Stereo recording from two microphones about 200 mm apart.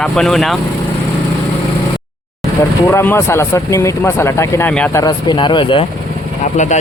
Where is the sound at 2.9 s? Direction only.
15° left (ahead or behind).